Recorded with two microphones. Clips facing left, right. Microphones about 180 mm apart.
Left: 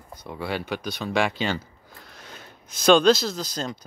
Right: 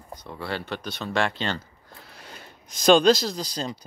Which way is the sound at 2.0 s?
5° right (ahead or behind).